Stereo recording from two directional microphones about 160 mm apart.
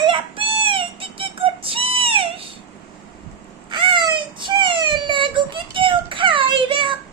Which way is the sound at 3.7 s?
30° right (ahead or behind).